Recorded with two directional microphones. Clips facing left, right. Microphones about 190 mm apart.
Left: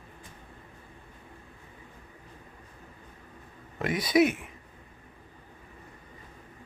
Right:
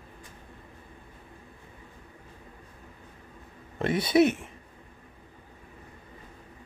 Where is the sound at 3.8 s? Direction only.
30° right (ahead or behind).